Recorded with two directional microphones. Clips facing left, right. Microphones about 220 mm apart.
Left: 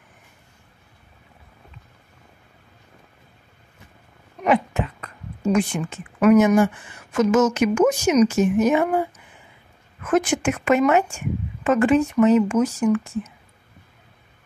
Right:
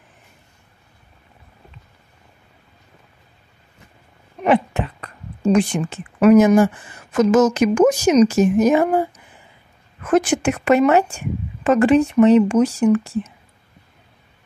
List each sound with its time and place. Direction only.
4.4 s speech: 30° right (ahead or behind)
10.0 s speech: 35° right (ahead or behind)